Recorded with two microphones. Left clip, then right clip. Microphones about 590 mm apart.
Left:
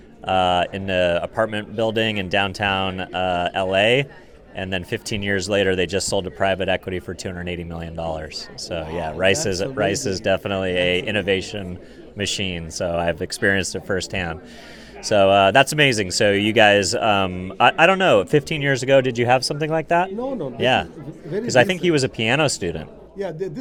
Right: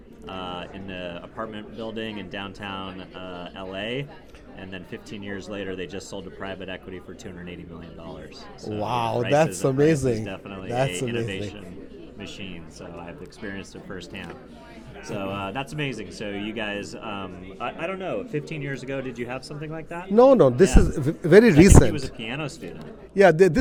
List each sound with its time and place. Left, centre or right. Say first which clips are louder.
0.3 s speech: left 16 dB; left
8.9 s speech: right 6 dB; right
10.1 s speech: left 8 dB; left
20.1 s a man's voice: right 12 dB; right
21.5 s speech: left 1 dB; left
23.1 s a man's voice: right 12 dB; right